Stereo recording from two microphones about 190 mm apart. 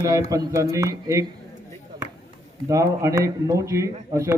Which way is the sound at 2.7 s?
15° right (ahead or behind).